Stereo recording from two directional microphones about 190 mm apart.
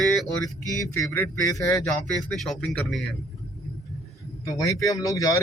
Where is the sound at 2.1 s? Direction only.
Centre (ahead or behind).